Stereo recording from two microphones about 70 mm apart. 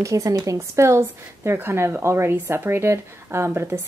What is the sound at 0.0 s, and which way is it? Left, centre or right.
Speech, right.